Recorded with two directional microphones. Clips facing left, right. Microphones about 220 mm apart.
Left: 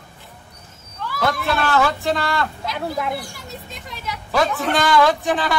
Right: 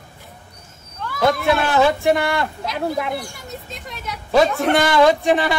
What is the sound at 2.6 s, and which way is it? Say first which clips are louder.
Speech: right 2 dB; centre (ahead or behind).